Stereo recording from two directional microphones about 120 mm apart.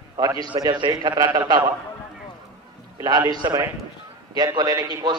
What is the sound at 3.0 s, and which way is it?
Speech, 35° right (ahead or behind).